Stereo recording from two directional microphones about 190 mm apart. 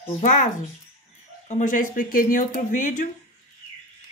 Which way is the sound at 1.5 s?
40° left (ahead or behind).